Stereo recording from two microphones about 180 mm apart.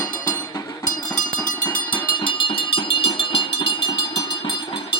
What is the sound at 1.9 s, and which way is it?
Music, 30° left (ahead or behind).